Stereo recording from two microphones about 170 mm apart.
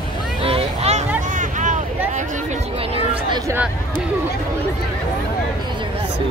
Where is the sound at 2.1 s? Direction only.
45° right (ahead or behind).